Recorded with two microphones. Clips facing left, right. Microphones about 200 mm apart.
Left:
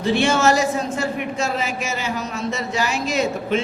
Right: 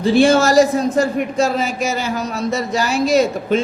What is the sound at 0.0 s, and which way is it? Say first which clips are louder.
A woman's voice: right 5 dB; 35° right (ahead or behind).